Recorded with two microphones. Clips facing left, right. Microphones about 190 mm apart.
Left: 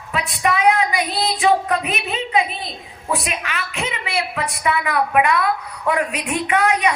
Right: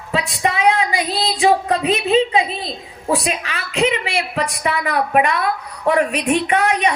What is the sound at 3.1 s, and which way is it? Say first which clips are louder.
A woman's voice: right 4 dB; 30° right (ahead or behind).